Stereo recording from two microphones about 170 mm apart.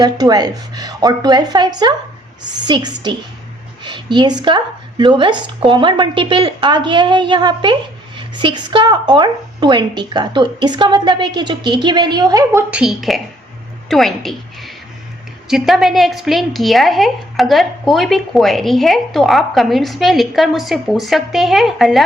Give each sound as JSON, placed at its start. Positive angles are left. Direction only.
{"t": 0.0, "sound": "a woman's voice", "side_deg": -25}
{"t": 12.8, "sound": "a woman's voice", "side_deg": 0}